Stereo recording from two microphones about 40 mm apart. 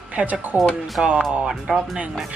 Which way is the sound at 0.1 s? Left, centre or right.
Right.